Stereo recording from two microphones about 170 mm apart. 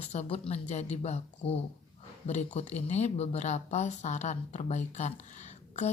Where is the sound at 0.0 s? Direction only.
40° left (ahead or behind).